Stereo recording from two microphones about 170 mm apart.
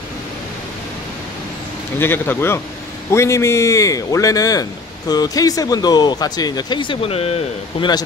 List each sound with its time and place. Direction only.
2.0 s a man's voice: 15° left (ahead or behind); by 7.9 s 35° left (ahead or behind)